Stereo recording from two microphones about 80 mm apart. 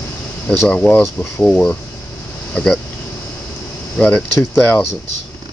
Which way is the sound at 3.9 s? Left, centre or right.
Centre.